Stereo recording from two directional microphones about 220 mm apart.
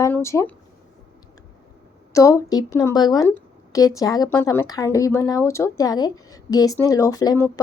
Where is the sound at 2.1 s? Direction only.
15° left (ahead or behind).